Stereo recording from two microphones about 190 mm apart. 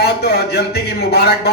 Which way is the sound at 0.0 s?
55° left (ahead or behind).